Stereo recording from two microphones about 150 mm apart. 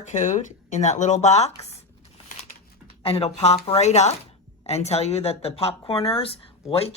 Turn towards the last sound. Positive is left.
turn(degrees=40)  # may be behind; listen again after turning